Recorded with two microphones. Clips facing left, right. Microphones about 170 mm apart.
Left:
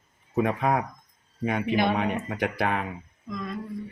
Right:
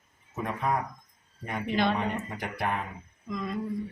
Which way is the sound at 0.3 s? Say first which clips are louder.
Left 6 dB; 70° left (ahead or behind).